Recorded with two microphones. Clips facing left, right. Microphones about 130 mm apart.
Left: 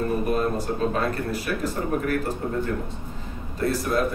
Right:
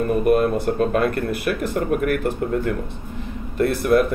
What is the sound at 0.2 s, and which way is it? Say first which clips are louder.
Speech: right 7 dB; 60° right (ahead or behind).